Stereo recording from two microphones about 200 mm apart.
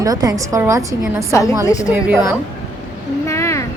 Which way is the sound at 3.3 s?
15° left (ahead or behind).